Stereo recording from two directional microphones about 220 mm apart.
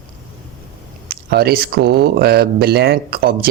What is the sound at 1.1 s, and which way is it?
Speech, 45° right (ahead or behind).